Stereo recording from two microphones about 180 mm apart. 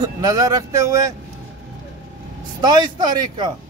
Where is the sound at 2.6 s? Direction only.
25° right (ahead or behind).